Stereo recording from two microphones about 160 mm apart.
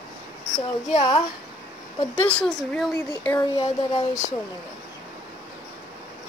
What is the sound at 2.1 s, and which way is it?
Speech, 10° left (ahead or behind).